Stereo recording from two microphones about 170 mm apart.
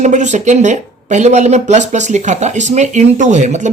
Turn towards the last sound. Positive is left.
turn(degrees=-45)  # may be behind; listen again after turning